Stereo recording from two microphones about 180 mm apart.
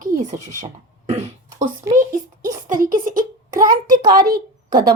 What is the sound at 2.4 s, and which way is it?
A woman's voice, 50° right (ahead or behind).